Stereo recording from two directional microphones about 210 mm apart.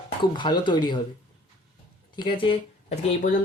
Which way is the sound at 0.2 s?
20° left (ahead or behind).